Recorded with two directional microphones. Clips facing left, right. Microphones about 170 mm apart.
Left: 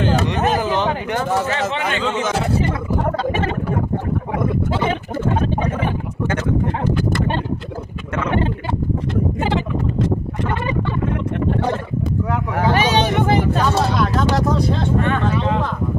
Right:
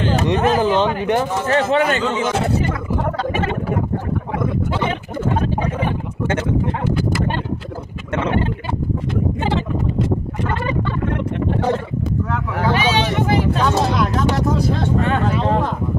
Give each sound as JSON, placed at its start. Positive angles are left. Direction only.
{"t": 0.3, "sound": "speech", "side_deg": -20}
{"t": 1.5, "sound": "speech", "side_deg": -40}
{"t": 12.5, "sound": "speech", "side_deg": 45}
{"t": 15.1, "sound": "speech", "side_deg": -40}